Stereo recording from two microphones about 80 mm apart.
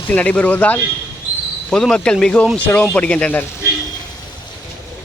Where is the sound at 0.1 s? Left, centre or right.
Centre.